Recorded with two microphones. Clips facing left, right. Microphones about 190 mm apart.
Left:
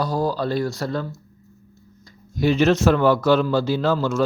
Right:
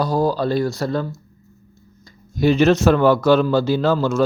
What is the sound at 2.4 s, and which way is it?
A man's voice, 40° right (ahead or behind).